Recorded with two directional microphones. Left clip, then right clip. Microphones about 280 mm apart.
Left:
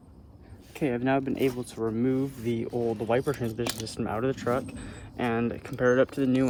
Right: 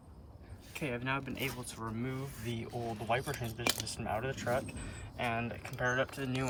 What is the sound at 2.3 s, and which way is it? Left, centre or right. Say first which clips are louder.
Speech: left 11 dB; left.